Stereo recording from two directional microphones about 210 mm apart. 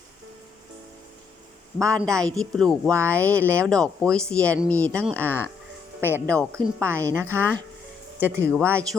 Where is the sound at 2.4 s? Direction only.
Centre (ahead or behind).